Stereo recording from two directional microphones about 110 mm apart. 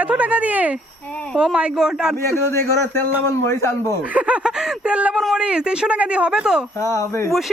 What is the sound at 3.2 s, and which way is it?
Speech, 25° left (ahead or behind).